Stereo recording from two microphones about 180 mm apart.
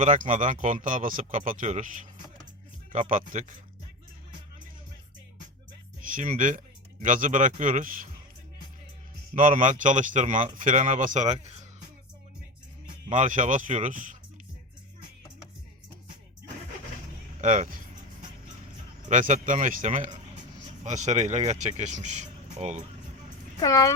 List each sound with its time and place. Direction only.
0.0 s speech: 45° right (ahead or behind)
6.1 s speech: 45° right (ahead or behind)
9.3 s speech: 45° right (ahead or behind)
13.1 s speech: 40° right (ahead or behind)
17.4 s speech: 45° right (ahead or behind)
19.0 s speech: 45° right (ahead or behind)
23.6 s speech: 20° left (ahead or behind)